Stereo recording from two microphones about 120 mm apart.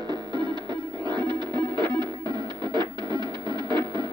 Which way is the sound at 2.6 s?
40° right (ahead or behind).